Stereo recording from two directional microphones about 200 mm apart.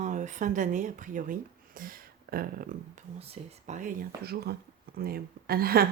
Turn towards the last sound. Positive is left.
turn(degrees=-50)  # may be behind; listen again after turning